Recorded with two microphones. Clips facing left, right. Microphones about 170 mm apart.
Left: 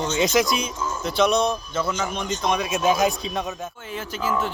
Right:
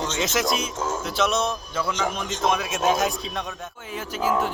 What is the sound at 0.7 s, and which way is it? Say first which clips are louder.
Speech: right 2 dB; 90° right.